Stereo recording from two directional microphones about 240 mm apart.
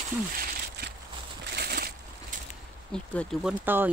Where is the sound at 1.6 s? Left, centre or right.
Right.